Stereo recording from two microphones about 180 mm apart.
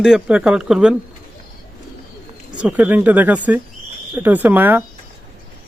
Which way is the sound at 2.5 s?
5° right (ahead or behind).